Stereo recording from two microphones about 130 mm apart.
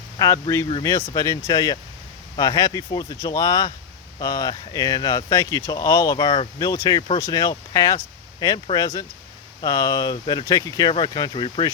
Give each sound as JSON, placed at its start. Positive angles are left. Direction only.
{"t": 0.2, "sound": "speech", "side_deg": 25}